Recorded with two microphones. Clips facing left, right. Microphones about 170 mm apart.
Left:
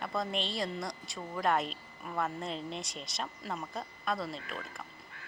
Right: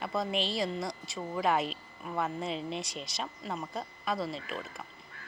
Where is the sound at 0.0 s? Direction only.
Centre (ahead or behind).